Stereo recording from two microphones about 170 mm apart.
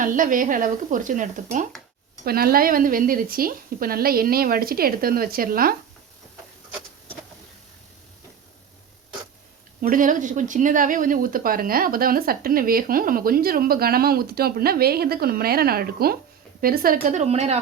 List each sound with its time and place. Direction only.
0.0 s speech: 50° right (ahead or behind)
2.2 s speech: 60° right (ahead or behind)
9.8 s speech: 50° right (ahead or behind)